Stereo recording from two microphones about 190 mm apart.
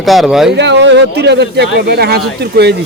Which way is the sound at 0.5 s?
65° right (ahead or behind).